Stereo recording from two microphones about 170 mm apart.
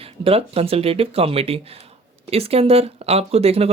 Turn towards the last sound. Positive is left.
turn(degrees=-35)  # may be behind; listen again after turning